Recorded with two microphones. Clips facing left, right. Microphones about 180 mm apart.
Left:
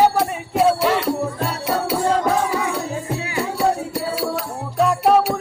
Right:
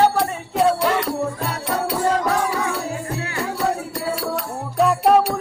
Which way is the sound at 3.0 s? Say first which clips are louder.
Left 2 dB; 15° left (ahead or behind).